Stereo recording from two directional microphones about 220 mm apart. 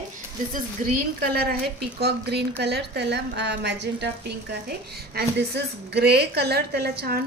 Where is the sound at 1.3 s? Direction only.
45° right (ahead or behind).